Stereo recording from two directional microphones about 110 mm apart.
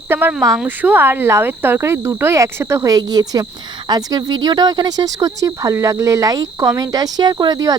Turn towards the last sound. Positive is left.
turn(degrees=-35)  # may be behind; listen again after turning